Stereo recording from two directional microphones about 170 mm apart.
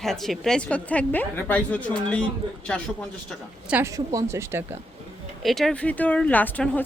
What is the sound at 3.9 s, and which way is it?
Speech, 20° right (ahead or behind).